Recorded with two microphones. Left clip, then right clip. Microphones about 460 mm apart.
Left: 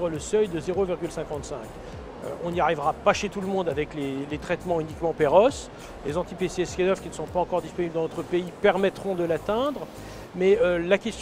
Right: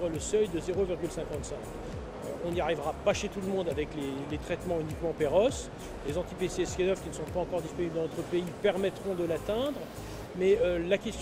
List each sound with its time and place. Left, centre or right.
0.3 s speech: left
2.5 s a man's voice: left